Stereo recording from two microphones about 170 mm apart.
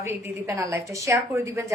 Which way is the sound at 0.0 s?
15° right (ahead or behind).